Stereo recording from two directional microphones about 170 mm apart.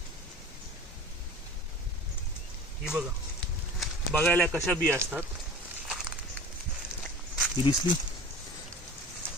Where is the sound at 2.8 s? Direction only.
5° right (ahead or behind).